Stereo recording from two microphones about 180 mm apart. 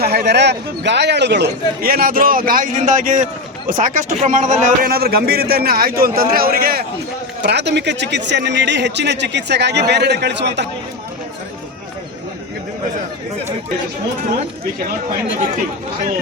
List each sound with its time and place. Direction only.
0.0 s a man's voice: 60° right (ahead or behind)
7.4 s speech: 70° right (ahead or behind)